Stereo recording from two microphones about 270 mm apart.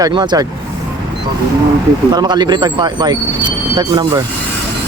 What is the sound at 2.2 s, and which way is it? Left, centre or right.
Speech, centre.